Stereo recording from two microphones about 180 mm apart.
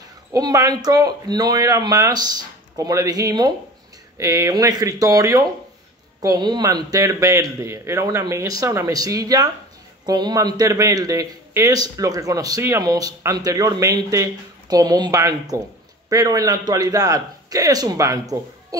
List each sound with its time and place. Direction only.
0.3 s a man's voice: 20° right (ahead or behind)
18.7 s owl: 20° right (ahead or behind)